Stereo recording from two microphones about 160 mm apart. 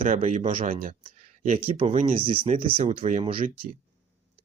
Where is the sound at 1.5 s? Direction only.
35° right (ahead or behind).